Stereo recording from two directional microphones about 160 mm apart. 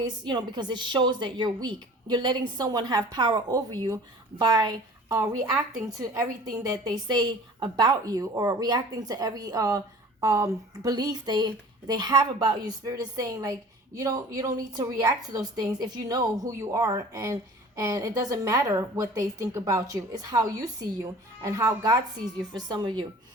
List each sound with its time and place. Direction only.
0.0 s a woman's voice: 25° right (ahead or behind)